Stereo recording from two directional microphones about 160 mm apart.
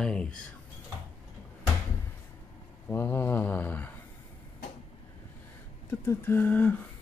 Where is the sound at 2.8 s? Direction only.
15° left (ahead or behind).